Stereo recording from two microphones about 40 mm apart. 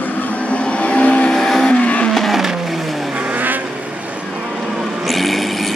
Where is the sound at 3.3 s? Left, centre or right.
Right.